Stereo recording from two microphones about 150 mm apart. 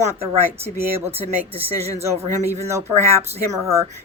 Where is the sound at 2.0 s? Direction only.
15° right (ahead or behind).